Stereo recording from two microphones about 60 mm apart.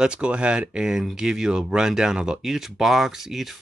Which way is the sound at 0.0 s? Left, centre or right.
Centre.